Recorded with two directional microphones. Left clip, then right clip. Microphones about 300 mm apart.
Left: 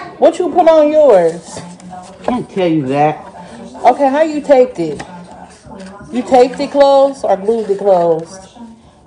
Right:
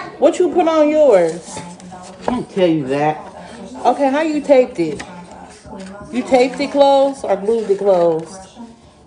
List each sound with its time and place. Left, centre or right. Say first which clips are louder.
0.2 s a woman's voice: left 4 dB; centre
2.5 s speech: left 1 dB; left
3.8 s a woman's voice: left 5 dB; centre
6.1 s a woman's voice: left 4 dB; centre